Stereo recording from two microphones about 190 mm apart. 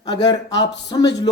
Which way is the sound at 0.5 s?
65° left (ahead or behind).